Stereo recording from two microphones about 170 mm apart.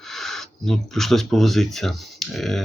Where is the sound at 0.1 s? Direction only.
Centre (ahead or behind).